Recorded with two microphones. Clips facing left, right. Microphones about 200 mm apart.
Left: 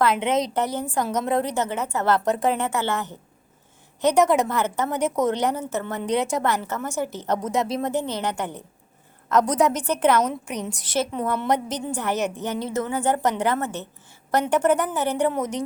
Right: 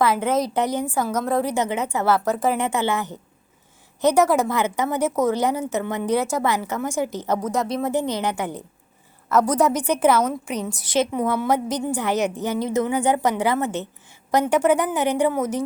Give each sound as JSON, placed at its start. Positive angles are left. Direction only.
{"t": 0.0, "sound": "a woman's voice", "side_deg": 0}
{"t": 0.5, "sound": "a woman's voice", "side_deg": -15}
{"t": 2.6, "sound": "a woman's voice", "side_deg": -15}
{"t": 4.2, "sound": "a woman's voice", "side_deg": -5}
{"t": 7.3, "sound": "a woman's voice", "side_deg": 0}